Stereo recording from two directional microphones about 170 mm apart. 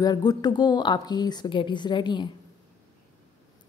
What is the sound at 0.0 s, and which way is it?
A woman's voice, 25° left (ahead or behind).